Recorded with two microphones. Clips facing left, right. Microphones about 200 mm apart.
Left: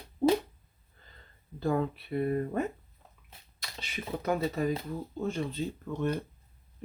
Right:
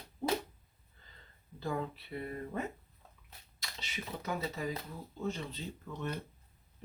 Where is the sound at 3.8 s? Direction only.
55° left (ahead or behind).